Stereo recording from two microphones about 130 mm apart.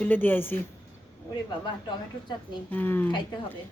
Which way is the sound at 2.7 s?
15° left (ahead or behind).